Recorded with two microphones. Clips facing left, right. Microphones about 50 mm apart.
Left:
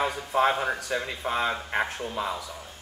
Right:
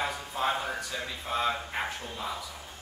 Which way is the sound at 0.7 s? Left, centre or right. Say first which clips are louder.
Left 5 dB; left.